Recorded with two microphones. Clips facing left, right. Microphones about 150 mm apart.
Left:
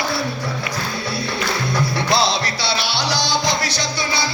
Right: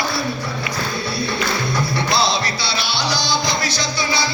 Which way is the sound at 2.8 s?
80° left.